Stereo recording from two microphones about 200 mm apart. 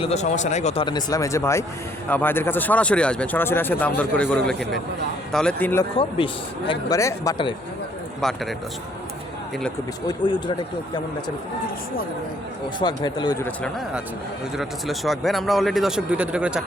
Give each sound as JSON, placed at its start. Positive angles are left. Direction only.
{"t": 0.0, "sound": "speech", "side_deg": 35}
{"t": 6.0, "sound": "speech", "side_deg": 25}
{"t": 8.2, "sound": "speech", "side_deg": 0}
{"t": 10.1, "sound": "speech", "side_deg": 25}
{"t": 12.8, "sound": "speech", "side_deg": 20}
{"t": 14.5, "sound": "speech", "side_deg": 0}